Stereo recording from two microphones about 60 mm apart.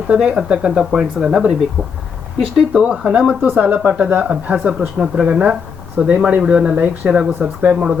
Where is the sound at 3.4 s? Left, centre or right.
Right.